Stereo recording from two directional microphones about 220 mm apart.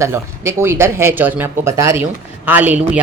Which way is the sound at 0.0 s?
10° right (ahead or behind).